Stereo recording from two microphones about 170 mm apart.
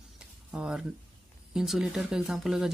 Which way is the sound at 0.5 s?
5° right (ahead or behind).